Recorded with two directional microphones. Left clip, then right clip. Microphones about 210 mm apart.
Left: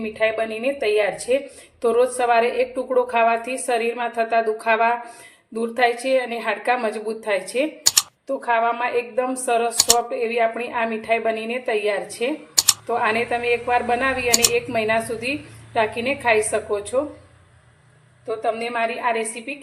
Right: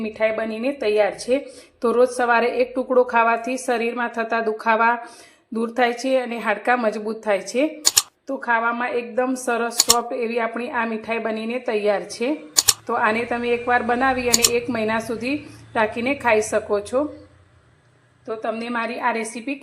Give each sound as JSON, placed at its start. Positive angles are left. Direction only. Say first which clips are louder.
{"t": 0.0, "sound": "a woman's voice", "louder": "even", "side_deg": -25}
{"t": 9.7, "sound": "speech", "louder": "even", "side_deg": 0}
{"t": 10.1, "sound": "a woman's voice", "louder": "left 2 dB", "side_deg": -25}
{"t": 12.5, "sound": "typing", "louder": "even", "side_deg": 0}
{"t": 12.9, "sound": "a woman's voice", "louder": "even", "side_deg": -20}
{"t": 14.3, "sound": "speech", "louder": "even", "side_deg": 0}
{"t": 14.5, "sound": "a woman's voice", "louder": "left 2 dB", "side_deg": -20}
{"t": 18.3, "sound": "a woman's voice", "louder": "left 3 dB", "side_deg": -15}